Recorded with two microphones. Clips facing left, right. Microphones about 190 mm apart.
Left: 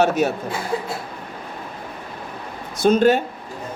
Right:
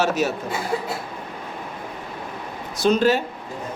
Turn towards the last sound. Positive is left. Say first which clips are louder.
# left 3 dB
turn(degrees=50)  # may be behind; listen again after turning